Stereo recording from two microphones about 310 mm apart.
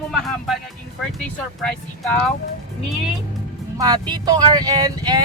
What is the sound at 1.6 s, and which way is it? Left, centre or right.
Speech, centre.